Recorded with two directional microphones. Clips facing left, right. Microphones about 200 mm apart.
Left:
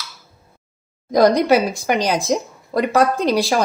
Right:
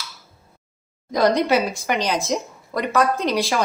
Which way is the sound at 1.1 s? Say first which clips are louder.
Left 4 dB; 40° left (ahead or behind).